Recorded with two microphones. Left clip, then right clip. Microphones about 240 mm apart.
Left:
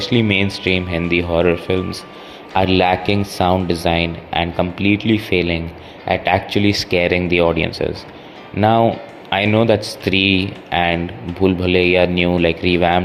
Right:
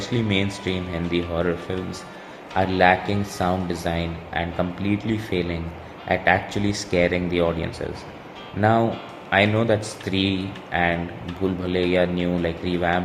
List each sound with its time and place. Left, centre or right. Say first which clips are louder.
0.0 s speech: left 7 dB; left